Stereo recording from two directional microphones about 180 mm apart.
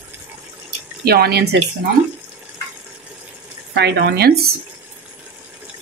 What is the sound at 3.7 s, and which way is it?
Speech, 70° right (ahead or behind).